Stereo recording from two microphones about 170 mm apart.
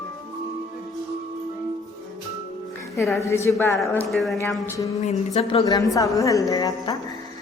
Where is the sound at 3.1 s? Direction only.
15° left (ahead or behind).